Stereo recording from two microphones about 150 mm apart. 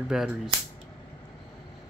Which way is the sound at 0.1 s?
5° right (ahead or behind).